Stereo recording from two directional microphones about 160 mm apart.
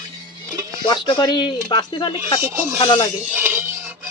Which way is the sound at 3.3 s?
10° right (ahead or behind).